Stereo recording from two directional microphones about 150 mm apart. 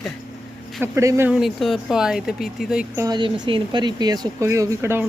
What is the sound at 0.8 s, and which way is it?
Speech, 20° right (ahead or behind).